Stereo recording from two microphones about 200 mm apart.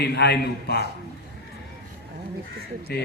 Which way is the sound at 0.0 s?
55° left (ahead or behind).